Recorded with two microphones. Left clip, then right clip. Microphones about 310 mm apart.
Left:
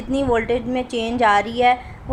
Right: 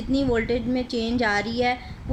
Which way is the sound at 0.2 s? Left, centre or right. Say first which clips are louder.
Left 5 dB; left.